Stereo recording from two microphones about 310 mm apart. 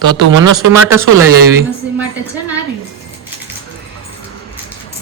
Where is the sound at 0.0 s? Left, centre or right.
Right.